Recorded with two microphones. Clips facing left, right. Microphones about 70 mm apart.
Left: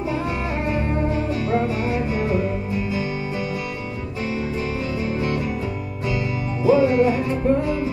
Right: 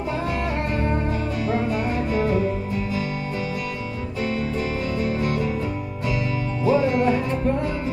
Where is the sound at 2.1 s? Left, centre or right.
Centre.